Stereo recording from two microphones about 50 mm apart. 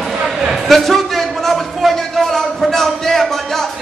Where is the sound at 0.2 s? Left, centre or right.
Centre.